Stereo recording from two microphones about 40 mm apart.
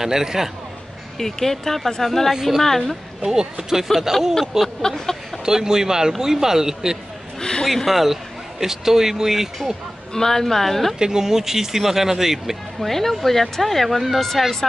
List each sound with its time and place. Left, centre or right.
0.0 s speech: centre
1.1 s speech: centre
4.1 s speech: centre
4.8 s speech: centre
5.4 s speech: centre
7.3 s a sound: centre
7.6 s a man's voice: centre
10.1 s speech: centre
11.0 s speech: centre
12.8 s speech: centre